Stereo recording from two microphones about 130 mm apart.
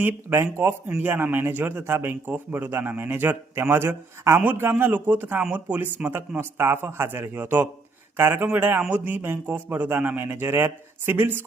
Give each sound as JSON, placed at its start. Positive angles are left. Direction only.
{"t": 0.0, "sound": "speech", "side_deg": -15}